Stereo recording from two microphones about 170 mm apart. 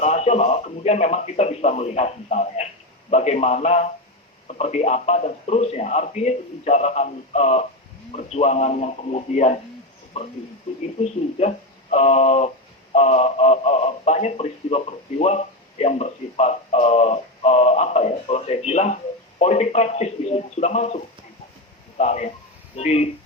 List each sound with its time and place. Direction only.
0.0 s speech: 40° left (ahead or behind)